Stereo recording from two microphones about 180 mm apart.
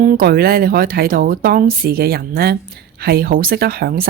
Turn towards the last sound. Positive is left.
turn(degrees=-55)  # may be behind; listen again after turning